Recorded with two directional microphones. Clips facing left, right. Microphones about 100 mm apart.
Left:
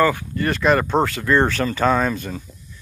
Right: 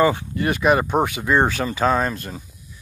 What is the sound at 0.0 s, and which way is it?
Speech, 20° right (ahead or behind).